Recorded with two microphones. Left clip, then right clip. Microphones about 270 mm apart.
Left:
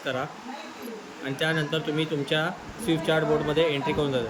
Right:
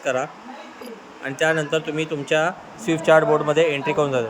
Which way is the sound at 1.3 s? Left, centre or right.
Centre.